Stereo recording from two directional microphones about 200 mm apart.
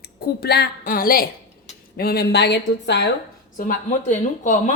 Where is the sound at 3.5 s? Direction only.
40° left (ahead or behind).